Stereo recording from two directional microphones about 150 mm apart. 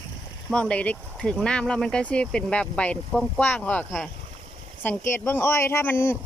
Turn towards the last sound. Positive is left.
turn(degrees=15)  # may be behind; listen again after turning